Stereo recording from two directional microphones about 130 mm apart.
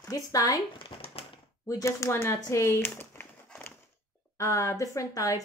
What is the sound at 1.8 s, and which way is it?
Speech, 20° left (ahead or behind).